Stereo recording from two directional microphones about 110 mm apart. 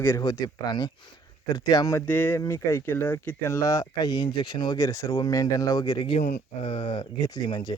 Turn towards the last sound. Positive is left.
turn(degrees=45)  # may be behind; listen again after turning